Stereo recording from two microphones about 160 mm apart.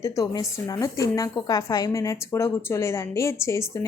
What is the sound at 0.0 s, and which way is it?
A woman's voice, 20° left (ahead or behind).